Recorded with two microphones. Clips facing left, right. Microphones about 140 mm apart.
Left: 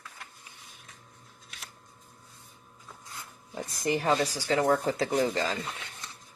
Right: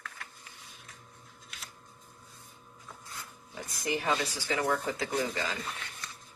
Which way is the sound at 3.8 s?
35° left (ahead or behind).